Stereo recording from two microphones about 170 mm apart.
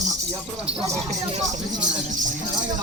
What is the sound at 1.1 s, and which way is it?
Speech, 45° right (ahead or behind).